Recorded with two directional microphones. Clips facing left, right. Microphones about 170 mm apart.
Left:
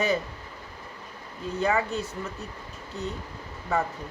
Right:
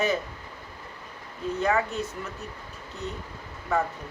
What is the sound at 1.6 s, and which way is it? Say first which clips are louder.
Speech: even; 30° left (ahead or behind).